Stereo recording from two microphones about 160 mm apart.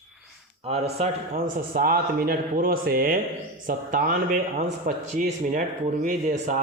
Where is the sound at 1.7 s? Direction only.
65° right (ahead or behind).